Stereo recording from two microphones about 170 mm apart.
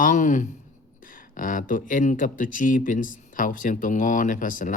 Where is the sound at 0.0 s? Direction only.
50° left (ahead or behind).